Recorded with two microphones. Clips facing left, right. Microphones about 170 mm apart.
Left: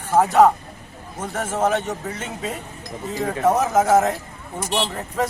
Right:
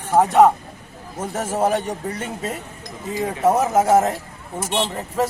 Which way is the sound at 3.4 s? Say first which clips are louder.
Right 1 dB; 10° right (ahead or behind).